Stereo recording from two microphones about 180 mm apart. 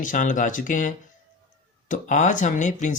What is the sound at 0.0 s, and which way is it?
Speech, 45° left (ahead or behind).